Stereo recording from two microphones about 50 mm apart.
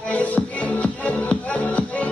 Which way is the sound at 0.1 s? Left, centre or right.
Left.